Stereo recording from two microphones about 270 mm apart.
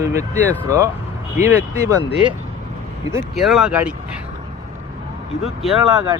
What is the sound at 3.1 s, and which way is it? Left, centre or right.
Speech, centre.